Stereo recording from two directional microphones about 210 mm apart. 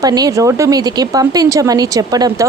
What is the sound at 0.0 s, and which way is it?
Speech, 20° right (ahead or behind).